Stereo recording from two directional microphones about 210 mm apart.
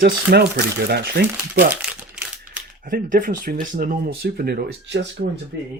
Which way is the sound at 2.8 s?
40° right (ahead or behind).